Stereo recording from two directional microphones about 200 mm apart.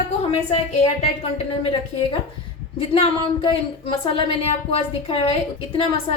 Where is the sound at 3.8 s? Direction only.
25° left (ahead or behind).